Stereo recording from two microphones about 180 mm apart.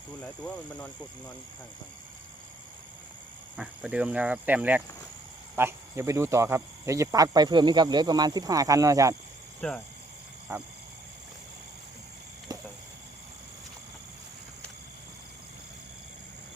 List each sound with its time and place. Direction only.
0.2 s speech: 5° left (ahead or behind)
3.6 s speech: 5° right (ahead or behind)
9.6 s speech: 5° left (ahead or behind)
10.5 s speech: 15° right (ahead or behind)
12.5 s a sound: 20° right (ahead or behind)